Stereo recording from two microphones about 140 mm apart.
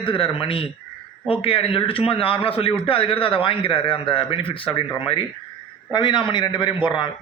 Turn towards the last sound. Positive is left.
turn(degrees=35)  # may be behind; listen again after turning